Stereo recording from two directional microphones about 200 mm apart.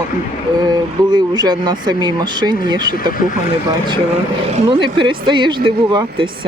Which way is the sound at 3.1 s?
45° left (ahead or behind).